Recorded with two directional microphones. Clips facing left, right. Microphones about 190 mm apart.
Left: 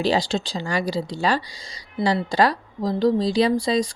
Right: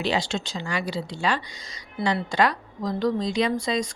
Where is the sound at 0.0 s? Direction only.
35° left (ahead or behind).